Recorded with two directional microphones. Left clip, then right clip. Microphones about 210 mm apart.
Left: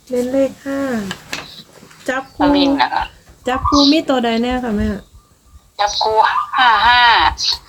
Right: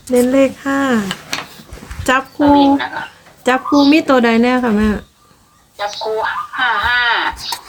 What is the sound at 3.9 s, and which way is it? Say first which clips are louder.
Speech: right 4 dB; 15° right (ahead or behind).